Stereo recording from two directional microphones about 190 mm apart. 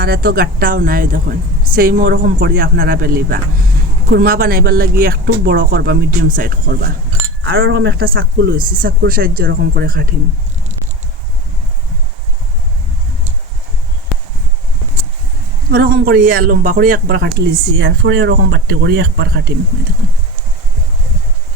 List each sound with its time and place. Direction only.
0.0 s speech: 50° right (ahead or behind)
7.4 s speech: 85° right; by 10.2 s 50° right (ahead or behind)
15.7 s speech: 50° right (ahead or behind)